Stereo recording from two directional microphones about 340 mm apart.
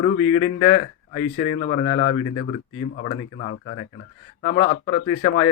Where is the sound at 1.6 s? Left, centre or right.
Left.